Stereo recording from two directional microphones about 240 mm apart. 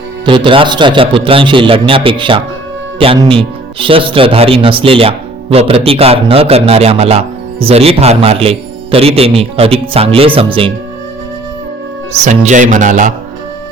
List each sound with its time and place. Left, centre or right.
0.3 s speech: right
12.5 s speech: right